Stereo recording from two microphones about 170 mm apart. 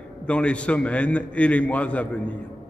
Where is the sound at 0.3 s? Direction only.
5° left (ahead or behind).